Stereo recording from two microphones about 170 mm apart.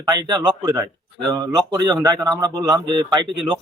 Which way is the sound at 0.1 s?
25° right (ahead or behind).